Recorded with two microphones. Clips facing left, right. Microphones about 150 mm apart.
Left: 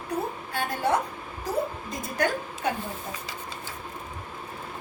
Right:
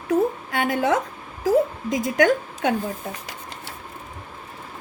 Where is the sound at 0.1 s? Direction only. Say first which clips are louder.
Right 10 dB; 75° right (ahead or behind).